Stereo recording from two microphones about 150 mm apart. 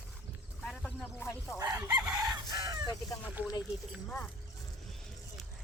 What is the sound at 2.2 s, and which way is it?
Chicken, 25° right (ahead or behind).